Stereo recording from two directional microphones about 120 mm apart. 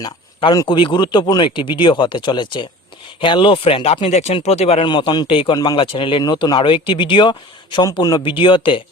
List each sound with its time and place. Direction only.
0.0 s speech: 40° left (ahead or behind); by 4.9 s 60° left (ahead or behind)
4.9 s speech: 40° left (ahead or behind)
8.2 s speech: 45° left (ahead or behind)